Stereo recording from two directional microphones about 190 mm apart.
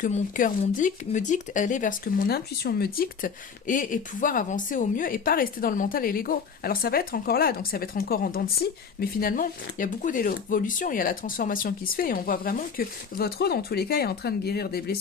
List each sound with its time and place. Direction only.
0.0 s speech: 45° left (ahead or behind)